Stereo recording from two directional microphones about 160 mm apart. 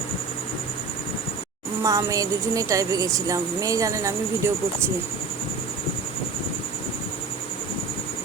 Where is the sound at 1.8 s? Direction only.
20° right (ahead or behind).